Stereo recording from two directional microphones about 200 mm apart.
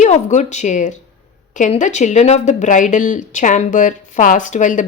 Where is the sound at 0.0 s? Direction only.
35° left (ahead or behind).